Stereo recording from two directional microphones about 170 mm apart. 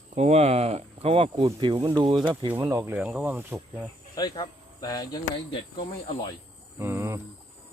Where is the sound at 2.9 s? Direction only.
5° right (ahead or behind).